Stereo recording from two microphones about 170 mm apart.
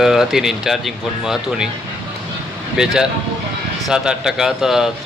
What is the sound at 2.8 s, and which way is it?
Speech, 5° right (ahead or behind).